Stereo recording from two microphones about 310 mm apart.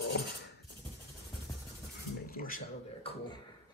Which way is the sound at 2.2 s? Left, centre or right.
Left.